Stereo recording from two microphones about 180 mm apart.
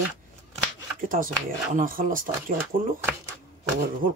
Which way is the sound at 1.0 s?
50° right (ahead or behind).